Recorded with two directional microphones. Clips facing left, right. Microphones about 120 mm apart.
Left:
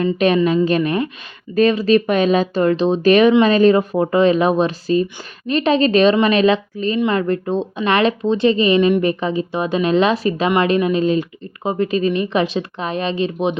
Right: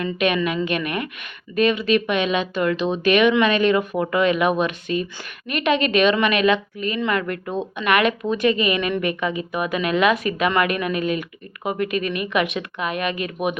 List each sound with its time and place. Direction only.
0.0 s speech: 35° left (ahead or behind)